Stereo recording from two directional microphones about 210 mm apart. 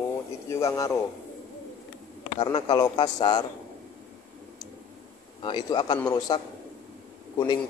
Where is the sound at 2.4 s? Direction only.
25° left (ahead or behind).